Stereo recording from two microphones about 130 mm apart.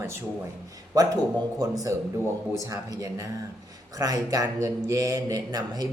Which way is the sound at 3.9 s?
25° right (ahead or behind).